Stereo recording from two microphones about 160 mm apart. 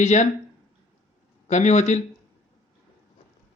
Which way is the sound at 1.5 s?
45° left (ahead or behind).